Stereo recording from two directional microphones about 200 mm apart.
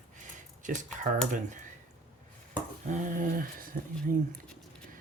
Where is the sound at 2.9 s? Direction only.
40° right (ahead or behind).